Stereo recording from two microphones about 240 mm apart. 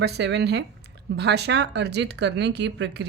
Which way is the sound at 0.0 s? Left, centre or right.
Right.